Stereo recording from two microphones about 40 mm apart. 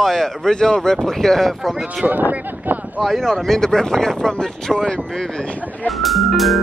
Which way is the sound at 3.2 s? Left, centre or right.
Centre.